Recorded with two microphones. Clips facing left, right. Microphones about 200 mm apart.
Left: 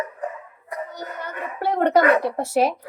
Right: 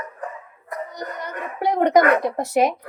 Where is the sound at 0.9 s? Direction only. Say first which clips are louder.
Right 2 dB; 15° right (ahead or behind).